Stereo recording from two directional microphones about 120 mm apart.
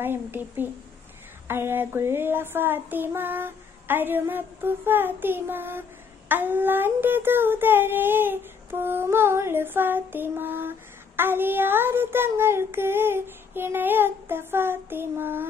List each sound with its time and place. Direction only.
0.0 s child singing: 20° right (ahead or behind)